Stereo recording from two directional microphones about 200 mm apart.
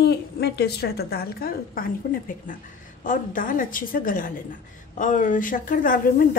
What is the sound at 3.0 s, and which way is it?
A woman's voice, 40° left (ahead or behind).